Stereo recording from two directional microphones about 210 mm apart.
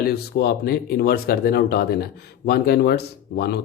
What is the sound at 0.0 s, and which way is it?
Speech, 50° left (ahead or behind).